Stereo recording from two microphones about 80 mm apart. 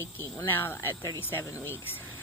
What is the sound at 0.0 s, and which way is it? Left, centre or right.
Speech, left.